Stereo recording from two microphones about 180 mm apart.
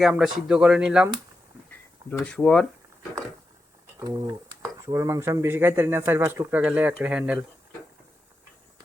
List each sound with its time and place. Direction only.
0.0 s speech: centre (ahead or behind)
2.0 s speech: 5° left (ahead or behind)
4.0 s speech: 20° right (ahead or behind)